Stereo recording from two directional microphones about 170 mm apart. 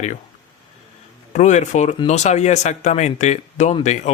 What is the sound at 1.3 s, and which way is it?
Speech, 45° left (ahead or behind).